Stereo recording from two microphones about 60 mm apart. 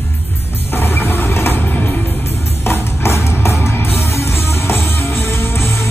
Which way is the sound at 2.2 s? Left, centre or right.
Left.